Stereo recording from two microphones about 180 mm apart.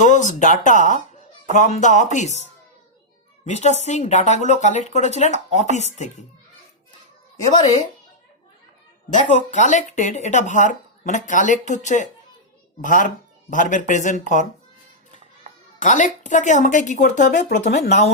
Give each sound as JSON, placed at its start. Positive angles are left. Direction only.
{"t": 0.0, "sound": "speech", "side_deg": 45}
{"t": 7.5, "sound": "speech", "side_deg": 25}
{"t": 9.1, "sound": "speech", "side_deg": 45}
{"t": 15.8, "sound": "speech", "side_deg": 45}